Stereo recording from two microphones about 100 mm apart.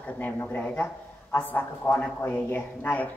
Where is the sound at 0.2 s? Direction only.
20° left (ahead or behind).